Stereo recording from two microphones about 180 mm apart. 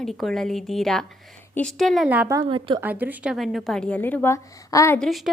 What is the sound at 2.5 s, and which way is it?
Speech, 30° right (ahead or behind).